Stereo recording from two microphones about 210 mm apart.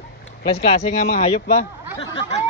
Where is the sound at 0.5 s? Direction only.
30° left (ahead or behind).